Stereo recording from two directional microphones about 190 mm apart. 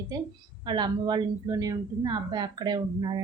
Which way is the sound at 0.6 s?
25° right (ahead or behind).